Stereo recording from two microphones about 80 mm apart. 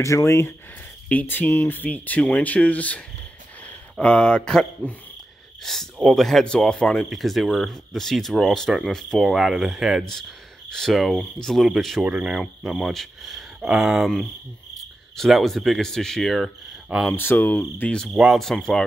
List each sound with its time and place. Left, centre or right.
0.0 s speech: left
1.0 s speech: left
4.0 s speech: centre
12.0 s speech: centre
17.1 s speech: left
18.1 s speech: centre
18.4 s speech: centre